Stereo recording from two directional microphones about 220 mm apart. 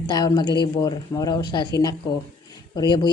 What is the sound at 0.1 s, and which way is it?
A woman's voice, 20° left (ahead or behind).